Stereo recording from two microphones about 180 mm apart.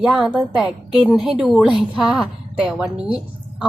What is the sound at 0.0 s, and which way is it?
A woman's voice, centre (ahead or behind).